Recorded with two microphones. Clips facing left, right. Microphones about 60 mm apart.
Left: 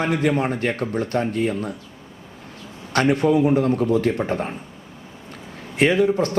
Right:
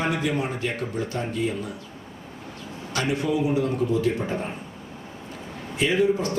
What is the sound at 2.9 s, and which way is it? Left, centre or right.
A man's voice, left.